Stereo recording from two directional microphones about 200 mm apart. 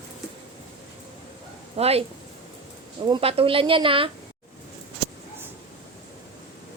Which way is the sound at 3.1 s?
25° right (ahead or behind).